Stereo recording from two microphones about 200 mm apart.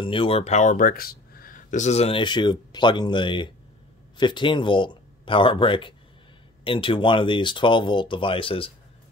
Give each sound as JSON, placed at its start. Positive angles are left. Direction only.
{"t": 0.0, "sound": "speech", "side_deg": 25}